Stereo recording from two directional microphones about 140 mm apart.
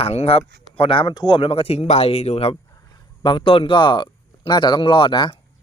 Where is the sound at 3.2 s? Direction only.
35° left (ahead or behind).